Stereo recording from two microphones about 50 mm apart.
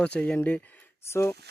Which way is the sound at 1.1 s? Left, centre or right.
Left.